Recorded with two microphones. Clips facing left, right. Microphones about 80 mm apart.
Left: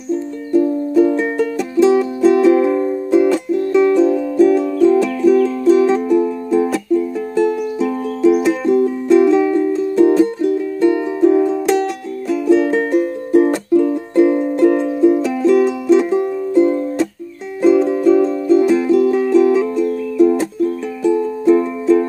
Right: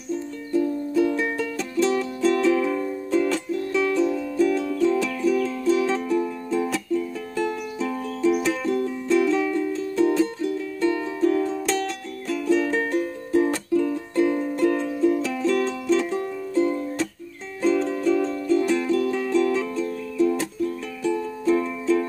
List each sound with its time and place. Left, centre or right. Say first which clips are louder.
0.5 s music: left 8 dB; left
1.8 s music: left 10 dB; centre
3.1 s music: left 9 dB; centre
12.4 s music: left 8 dB; left
12.7 s music: left 8 dB; centre
17.6 s music: left 9 dB; centre